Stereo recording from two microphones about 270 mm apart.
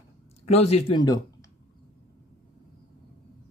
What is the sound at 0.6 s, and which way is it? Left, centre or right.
Speech, left.